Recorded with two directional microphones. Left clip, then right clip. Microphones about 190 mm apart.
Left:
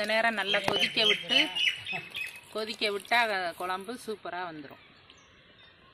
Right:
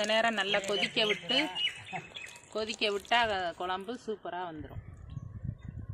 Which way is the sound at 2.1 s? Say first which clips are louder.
Left 5 dB; 20° right (ahead or behind).